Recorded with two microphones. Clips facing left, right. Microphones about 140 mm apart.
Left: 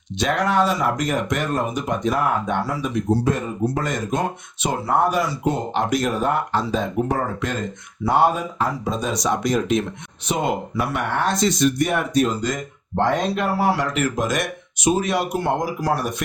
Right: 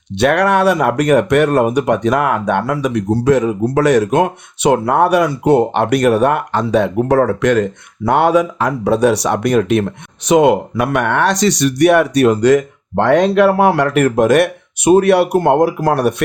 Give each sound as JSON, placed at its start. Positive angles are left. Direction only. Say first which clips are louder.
{"t": 0.1, "sound": "speech", "louder": "right 8 dB", "side_deg": -65}